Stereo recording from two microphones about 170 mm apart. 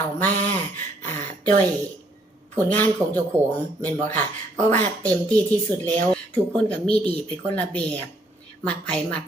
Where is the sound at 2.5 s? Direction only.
10° left (ahead or behind).